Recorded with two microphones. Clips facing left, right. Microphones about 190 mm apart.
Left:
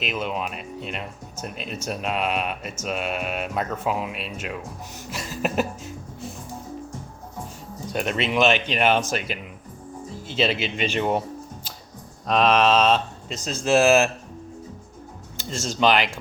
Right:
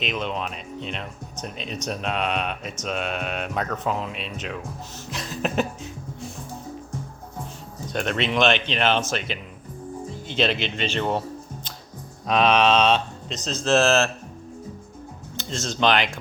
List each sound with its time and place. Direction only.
0.0 s speech: 5° left (ahead or behind)
5.1 s music: 5° left (ahead or behind)
7.9 s speech: 5° left (ahead or behind)
12.3 s speech: centre (ahead or behind)
15.4 s speech: 10° left (ahead or behind)